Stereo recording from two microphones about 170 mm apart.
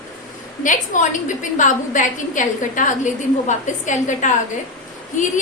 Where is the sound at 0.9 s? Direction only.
50° left (ahead or behind).